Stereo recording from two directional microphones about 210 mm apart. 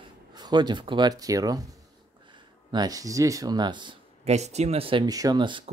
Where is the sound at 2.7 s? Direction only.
15° right (ahead or behind).